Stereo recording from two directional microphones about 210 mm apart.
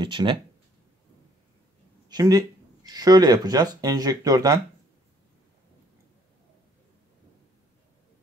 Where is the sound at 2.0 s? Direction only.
20° right (ahead or behind).